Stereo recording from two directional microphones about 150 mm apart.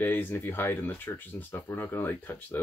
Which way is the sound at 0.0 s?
15° left (ahead or behind).